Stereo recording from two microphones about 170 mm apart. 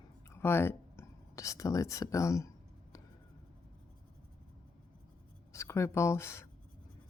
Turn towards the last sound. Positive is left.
turn(degrees=15)  # may be behind; listen again after turning